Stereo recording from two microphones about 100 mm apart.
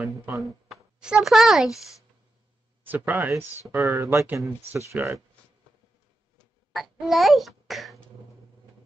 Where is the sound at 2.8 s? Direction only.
15° right (ahead or behind).